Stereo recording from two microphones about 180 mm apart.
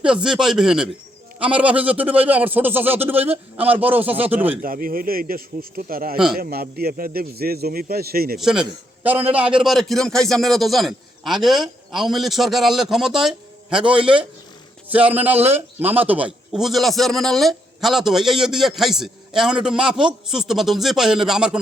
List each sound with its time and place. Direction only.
0.0 s speech: 5° right (ahead or behind)
4.6 s a man's voice: 50° right (ahead or behind)
8.4 s speech: centre (ahead or behind)